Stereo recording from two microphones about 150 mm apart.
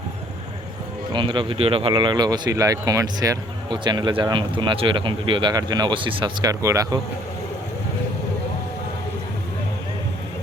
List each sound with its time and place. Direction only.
1.1 s speech: 35° right (ahead or behind)